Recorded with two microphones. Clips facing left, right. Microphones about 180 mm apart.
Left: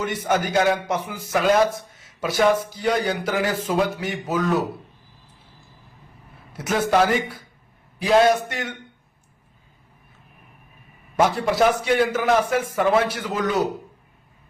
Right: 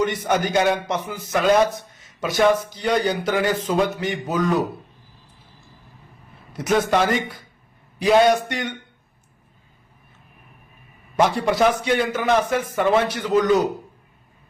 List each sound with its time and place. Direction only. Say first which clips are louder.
0.0 s a man's voice: right 2 dB; 5° left (ahead or behind)
6.5 s a man's voice: right 1 dB; 5° left (ahead or behind)
11.2 s a man's voice: right 1 dB; 5° left (ahead or behind)